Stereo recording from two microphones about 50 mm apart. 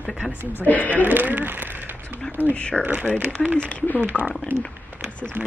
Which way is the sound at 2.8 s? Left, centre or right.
Right.